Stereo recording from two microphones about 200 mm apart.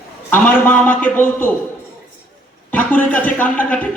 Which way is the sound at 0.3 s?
10° left (ahead or behind).